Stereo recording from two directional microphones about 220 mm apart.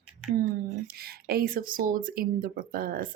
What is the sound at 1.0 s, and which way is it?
Speech, 45° right (ahead or behind).